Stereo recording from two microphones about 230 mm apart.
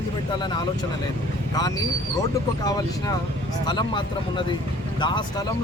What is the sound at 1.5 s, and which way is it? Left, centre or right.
Speech, centre.